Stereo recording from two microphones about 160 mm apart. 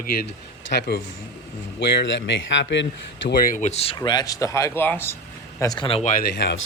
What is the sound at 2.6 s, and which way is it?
Speech, 90° left.